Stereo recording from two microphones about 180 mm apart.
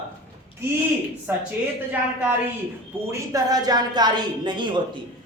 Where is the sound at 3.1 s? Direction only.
20° right (ahead or behind).